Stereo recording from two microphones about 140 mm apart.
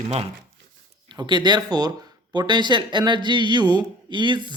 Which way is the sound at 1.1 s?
30° right (ahead or behind).